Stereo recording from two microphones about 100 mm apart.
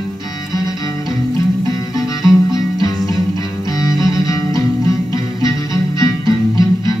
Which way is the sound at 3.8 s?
35° left (ahead or behind).